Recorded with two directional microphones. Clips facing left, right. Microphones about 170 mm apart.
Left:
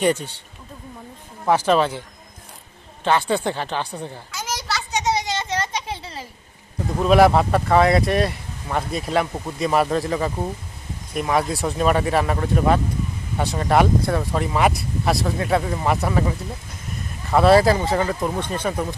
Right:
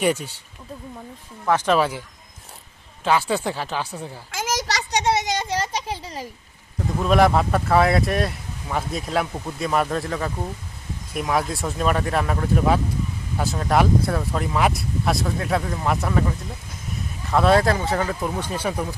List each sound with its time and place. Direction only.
0.0 s speech: 10° right (ahead or behind)
1.6 s speech: 5° right (ahead or behind)
3.0 s speech: 5° right (ahead or behind)
4.3 s children playing: 90° right
5.4 s a sound: 10° right (ahead or behind)
7.0 s speech: 5° left (ahead or behind)
17.3 s speech: 5° left (ahead or behind)
18.3 s speech: 10° right (ahead or behind)